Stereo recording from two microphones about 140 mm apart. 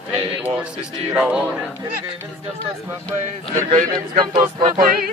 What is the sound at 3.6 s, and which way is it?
Speech, 65° right (ahead or behind).